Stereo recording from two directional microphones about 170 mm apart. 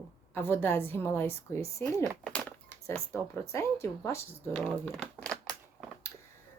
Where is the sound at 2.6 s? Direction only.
15° left (ahead or behind).